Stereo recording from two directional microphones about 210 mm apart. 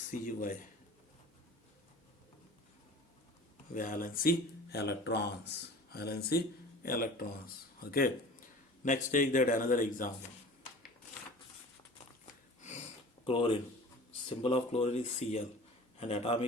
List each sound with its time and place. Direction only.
0.1 s a man's voice: 40° left (ahead or behind)
3.8 s speech: 40° left (ahead or behind)
13.2 s speech: 25° left (ahead or behind)